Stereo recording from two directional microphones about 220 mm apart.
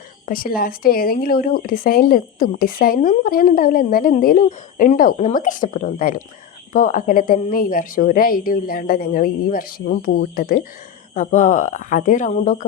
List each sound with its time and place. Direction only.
0.3 s speech: 40° left (ahead or behind)